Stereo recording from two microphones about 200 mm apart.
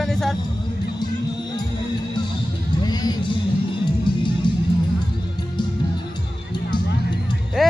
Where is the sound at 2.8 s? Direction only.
20° left (ahead or behind).